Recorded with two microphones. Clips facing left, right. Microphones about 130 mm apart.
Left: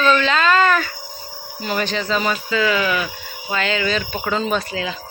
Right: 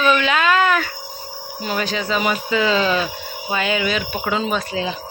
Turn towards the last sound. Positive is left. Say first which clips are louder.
# even
turn(degrees=-5)  # may be behind; listen again after turning